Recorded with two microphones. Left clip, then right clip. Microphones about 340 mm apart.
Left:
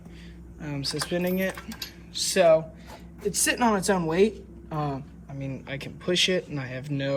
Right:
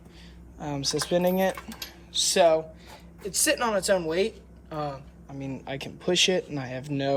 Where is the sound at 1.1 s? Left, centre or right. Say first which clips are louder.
Right 5 dB; right.